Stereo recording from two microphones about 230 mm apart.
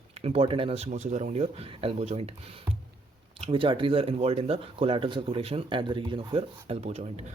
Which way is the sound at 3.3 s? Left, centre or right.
Right.